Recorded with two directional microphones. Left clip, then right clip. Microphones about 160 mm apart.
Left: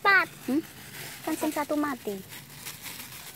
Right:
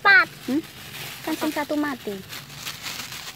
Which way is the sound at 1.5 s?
5° left (ahead or behind).